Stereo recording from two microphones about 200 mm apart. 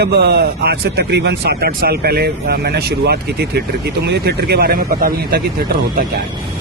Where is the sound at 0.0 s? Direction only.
55° right (ahead or behind).